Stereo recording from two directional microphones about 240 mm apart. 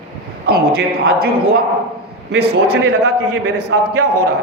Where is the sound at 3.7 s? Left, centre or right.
Right.